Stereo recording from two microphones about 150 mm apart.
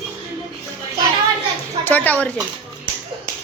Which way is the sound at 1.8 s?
10° left (ahead or behind).